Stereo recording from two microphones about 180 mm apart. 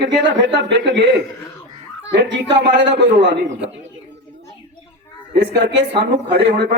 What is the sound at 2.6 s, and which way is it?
Speech, 80° right.